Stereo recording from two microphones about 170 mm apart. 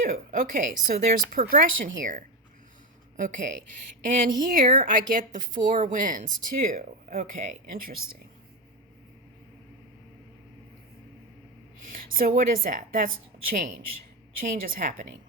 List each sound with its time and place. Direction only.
0.0 s speech: 55° right (ahead or behind)
3.2 s a woman's voice: 50° right (ahead or behind)
11.9 s a sound: 55° right (ahead or behind)
12.4 s a woman's voice: 55° right (ahead or behind)